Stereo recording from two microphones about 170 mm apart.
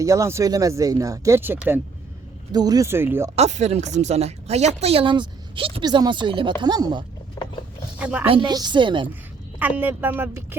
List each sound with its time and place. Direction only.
0.0 s speech: 20° right (ahead or behind)
2.5 s speech: 25° right (ahead or behind)
3.3 s speech: 40° right (ahead or behind); by 7.0 s 25° right (ahead or behind)
7.9 s a woman's voice: 10° right (ahead or behind)
8.3 s speech: 25° right (ahead or behind)
9.6 s speech: 10° right (ahead or behind)